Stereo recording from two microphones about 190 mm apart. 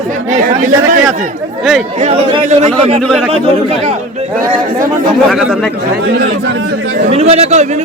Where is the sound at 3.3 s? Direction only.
35° right (ahead or behind).